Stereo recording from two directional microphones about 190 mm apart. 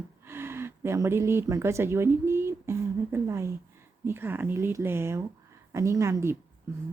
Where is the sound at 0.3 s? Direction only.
10° right (ahead or behind).